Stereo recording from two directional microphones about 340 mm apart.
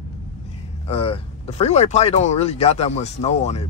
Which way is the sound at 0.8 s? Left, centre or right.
Centre.